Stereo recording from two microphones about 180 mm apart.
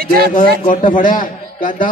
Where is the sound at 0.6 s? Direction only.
45° left (ahead or behind).